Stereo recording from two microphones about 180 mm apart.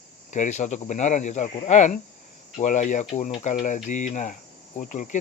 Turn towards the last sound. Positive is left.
turn(degrees=45)  # may be behind; listen again after turning